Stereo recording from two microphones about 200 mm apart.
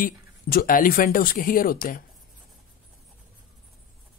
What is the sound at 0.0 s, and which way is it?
Speech, 45° left (ahead or behind).